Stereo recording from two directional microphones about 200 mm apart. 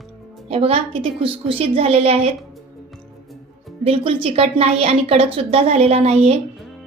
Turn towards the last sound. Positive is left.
turn(degrees=-30)  # may be behind; listen again after turning